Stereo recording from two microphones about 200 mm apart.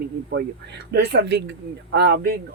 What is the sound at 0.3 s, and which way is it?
Speech, 60° right (ahead or behind).